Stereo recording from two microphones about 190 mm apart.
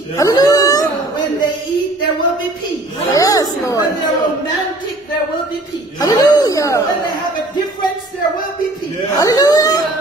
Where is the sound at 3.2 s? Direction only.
20° left (ahead or behind).